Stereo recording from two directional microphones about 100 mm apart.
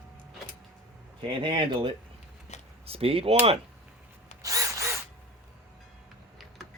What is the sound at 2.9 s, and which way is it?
Speech, 75° right (ahead or behind).